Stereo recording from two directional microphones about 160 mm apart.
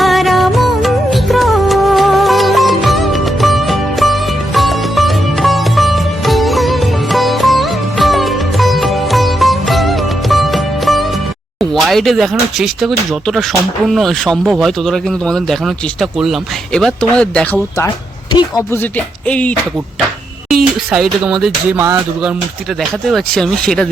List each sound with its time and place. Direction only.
0.0 s music: centre (ahead or behind)
11.6 s speech: centre (ahead or behind)
18.3 s a woman's voice: 25° left (ahead or behind)
18.8 s music: 10° left (ahead or behind)
20.7 s speech: 5° right (ahead or behind)